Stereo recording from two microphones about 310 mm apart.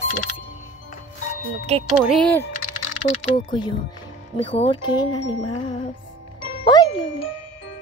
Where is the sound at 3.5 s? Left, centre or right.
Centre.